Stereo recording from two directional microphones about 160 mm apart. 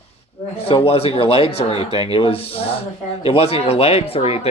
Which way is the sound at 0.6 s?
35° left (ahead or behind).